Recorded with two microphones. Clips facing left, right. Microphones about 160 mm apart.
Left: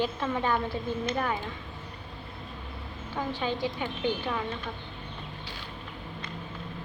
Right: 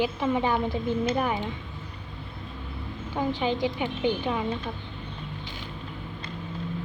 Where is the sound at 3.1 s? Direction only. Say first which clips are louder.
Right 4 dB; 15° right (ahead or behind).